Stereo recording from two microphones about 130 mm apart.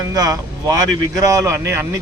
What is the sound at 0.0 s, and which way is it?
Speech, 30° right (ahead or behind).